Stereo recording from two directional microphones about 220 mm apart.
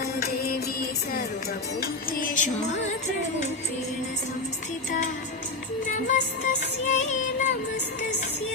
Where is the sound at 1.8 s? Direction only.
35° left (ahead or behind).